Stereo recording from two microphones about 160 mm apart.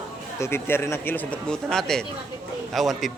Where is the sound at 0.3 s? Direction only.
15° left (ahead or behind).